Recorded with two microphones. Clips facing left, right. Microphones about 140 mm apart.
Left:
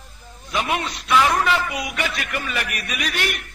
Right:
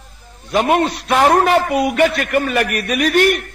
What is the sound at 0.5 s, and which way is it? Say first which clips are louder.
A man's voice: right 9 dB; 50° right (ahead or behind).